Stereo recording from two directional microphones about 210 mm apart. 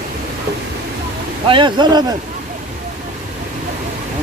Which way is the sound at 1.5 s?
20° right (ahead or behind).